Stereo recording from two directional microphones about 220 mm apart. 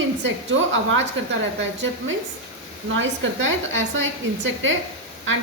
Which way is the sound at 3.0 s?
60° right (ahead or behind).